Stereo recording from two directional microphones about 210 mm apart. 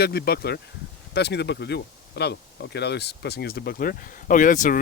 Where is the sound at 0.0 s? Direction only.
50° left (ahead or behind).